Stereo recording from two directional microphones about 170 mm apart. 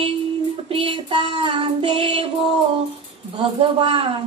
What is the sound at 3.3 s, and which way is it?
Speech, 35° right (ahead or behind).